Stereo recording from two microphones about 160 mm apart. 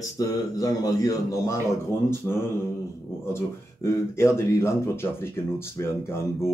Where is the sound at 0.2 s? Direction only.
25° left (ahead or behind).